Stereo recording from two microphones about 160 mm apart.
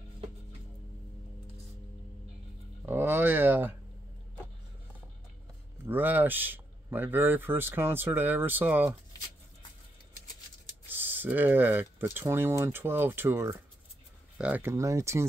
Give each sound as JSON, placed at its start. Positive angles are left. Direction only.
{"t": 2.8, "sound": "speech", "side_deg": -15}
{"t": 5.9, "sound": "speech", "side_deg": -10}
{"t": 10.9, "sound": "speech", "side_deg": -10}